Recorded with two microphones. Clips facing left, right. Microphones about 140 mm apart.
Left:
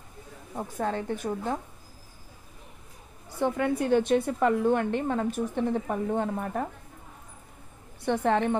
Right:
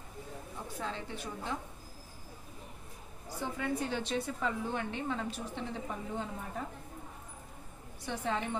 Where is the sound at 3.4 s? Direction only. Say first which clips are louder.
Left 9 dB; 60° left (ahead or behind).